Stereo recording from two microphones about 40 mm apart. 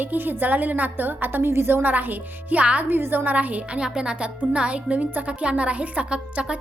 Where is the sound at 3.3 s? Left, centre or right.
Right.